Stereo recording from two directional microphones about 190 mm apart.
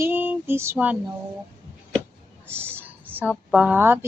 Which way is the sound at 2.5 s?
10° right (ahead or behind).